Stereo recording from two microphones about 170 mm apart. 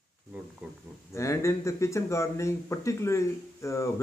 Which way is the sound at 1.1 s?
15° left (ahead or behind).